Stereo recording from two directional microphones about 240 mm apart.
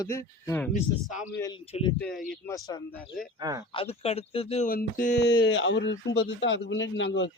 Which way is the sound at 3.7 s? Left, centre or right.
Left.